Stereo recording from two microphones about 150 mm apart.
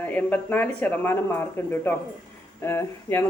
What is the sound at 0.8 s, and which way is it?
A woman's voice, 10° left (ahead or behind).